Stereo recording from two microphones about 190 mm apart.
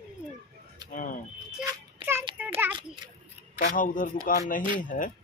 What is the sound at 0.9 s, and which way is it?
Speech, 45° left (ahead or behind).